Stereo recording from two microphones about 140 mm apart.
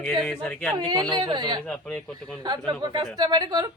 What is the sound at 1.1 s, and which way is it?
Speech, 30° right (ahead or behind).